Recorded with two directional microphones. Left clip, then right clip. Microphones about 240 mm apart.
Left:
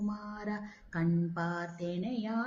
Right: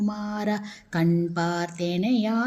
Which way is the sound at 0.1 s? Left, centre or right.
Right.